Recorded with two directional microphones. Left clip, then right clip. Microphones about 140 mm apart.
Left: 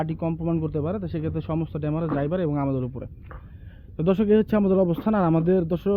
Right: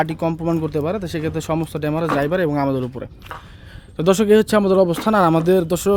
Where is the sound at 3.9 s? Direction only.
25° right (ahead or behind).